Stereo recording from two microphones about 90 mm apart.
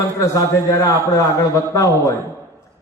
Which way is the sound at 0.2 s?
35° left (ahead or behind).